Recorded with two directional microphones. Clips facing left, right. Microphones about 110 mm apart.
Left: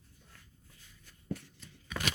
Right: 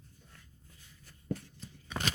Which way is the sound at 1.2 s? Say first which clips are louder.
Right 2 dB; 35° right (ahead or behind).